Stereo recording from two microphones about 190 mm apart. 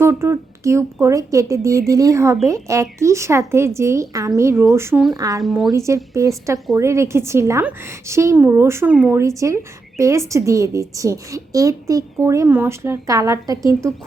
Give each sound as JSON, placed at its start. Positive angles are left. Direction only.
{"t": 0.0, "sound": "a woman's voice", "side_deg": -15}
{"t": 5.4, "sound": "speech", "side_deg": 0}
{"t": 5.7, "sound": "a woman's voice", "side_deg": -15}